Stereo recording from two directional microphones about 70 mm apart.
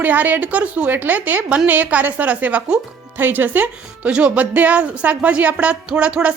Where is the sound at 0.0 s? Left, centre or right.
Right.